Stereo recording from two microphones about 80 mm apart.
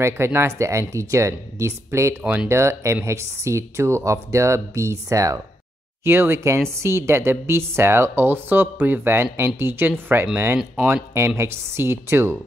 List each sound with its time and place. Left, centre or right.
0.0 s speech: right
6.0 s speech: right